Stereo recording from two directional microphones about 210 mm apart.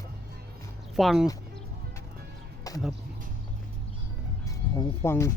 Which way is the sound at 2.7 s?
15° left (ahead or behind).